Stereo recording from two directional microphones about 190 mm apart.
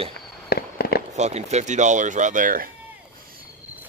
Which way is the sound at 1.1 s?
35° right (ahead or behind).